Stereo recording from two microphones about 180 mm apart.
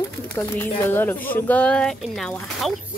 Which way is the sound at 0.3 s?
10° left (ahead or behind).